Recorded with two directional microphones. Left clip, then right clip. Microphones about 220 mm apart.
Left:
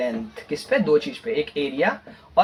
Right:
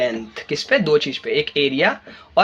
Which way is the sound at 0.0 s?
50° right (ahead or behind).